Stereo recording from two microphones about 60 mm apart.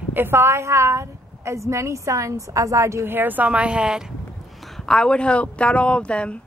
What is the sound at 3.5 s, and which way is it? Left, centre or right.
Speech, centre.